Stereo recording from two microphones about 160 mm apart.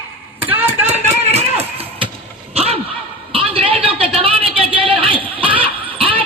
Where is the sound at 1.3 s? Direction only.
40° right (ahead or behind).